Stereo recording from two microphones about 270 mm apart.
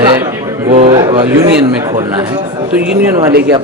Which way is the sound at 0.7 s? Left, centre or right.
Right.